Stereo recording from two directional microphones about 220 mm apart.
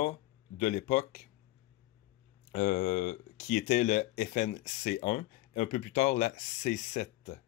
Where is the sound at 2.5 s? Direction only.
35° left (ahead or behind).